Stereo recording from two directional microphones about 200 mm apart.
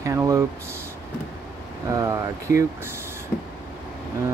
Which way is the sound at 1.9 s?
15° right (ahead or behind).